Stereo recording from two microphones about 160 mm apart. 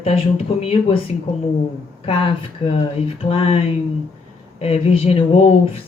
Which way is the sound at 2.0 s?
35° left (ahead or behind).